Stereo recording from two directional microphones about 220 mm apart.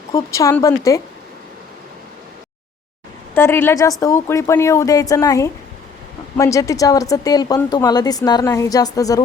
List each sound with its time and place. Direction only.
0.1 s speech: 15° left (ahead or behind)
3.3 s speech: 10° left (ahead or behind)